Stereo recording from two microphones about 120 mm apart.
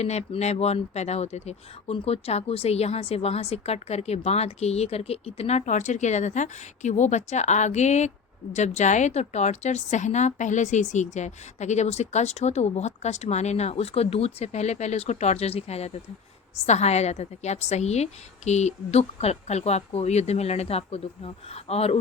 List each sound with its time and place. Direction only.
0.0 s a woman's voice: 65° left (ahead or behind)